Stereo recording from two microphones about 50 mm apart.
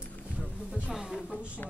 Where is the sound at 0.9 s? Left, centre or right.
Centre.